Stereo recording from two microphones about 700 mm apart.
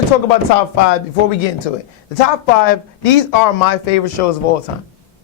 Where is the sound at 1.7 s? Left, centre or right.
Left.